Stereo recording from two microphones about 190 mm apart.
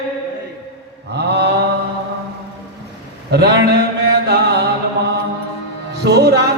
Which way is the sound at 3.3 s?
60° right (ahead or behind).